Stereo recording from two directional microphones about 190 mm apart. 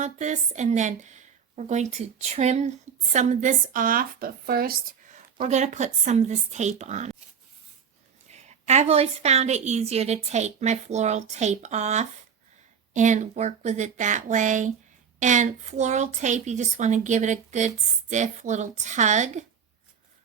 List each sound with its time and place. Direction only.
0.0 s speech: 40° right (ahead or behind)
8.3 s speech: 35° right (ahead or behind)